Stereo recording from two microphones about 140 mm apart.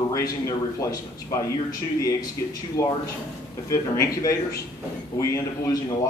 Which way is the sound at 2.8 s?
25° left (ahead or behind).